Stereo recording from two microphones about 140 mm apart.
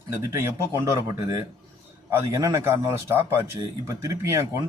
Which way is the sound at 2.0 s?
20° right (ahead or behind).